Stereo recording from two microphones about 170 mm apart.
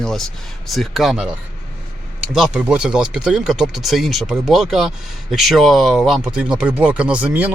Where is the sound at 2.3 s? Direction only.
5° right (ahead or behind).